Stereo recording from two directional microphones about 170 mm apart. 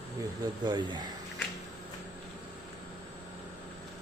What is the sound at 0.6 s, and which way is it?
Speech, 25° right (ahead or behind).